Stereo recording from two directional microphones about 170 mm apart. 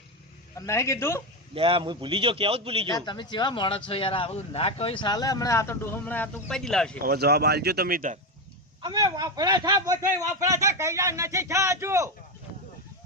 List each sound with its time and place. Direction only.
0.6 s a man's voice: 15° left (ahead or behind)
1.5 s a man's voice: 30° right (ahead or behind)
2.9 s speech: 25° left (ahead or behind); by 7.0 s 5° left (ahead or behind)
7.0 s speech: 65° right (ahead or behind)
8.8 s speech: 25° right (ahead or behind)